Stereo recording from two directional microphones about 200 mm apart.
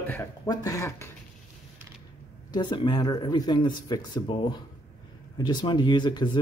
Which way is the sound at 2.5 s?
20° left (ahead or behind).